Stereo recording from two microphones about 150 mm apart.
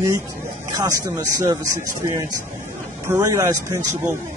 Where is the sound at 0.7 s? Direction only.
20° right (ahead or behind).